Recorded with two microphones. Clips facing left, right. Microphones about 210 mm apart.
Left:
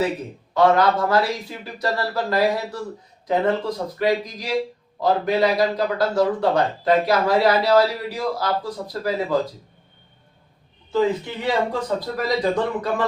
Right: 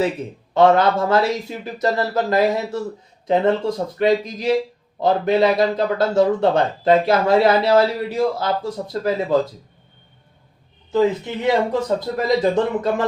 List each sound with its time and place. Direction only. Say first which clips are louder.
0.5 s a man's voice: right 2 dB; 25° right (ahead or behind)
11.4 s a man's voice: right 4 dB; 20° right (ahead or behind)